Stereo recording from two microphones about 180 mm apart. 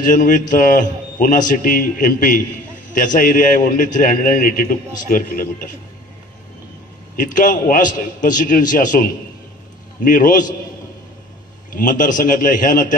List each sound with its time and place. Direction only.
0.0 s a man's voice: 45° left (ahead or behind)
7.2 s a man's voice: 45° left (ahead or behind)
11.7 s a man's voice: 45° left (ahead or behind)